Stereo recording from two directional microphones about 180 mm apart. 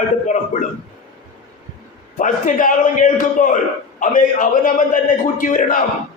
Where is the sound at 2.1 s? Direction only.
45° left (ahead or behind).